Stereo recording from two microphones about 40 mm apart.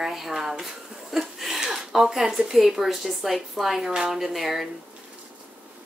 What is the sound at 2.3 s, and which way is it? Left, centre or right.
A woman's voice, centre.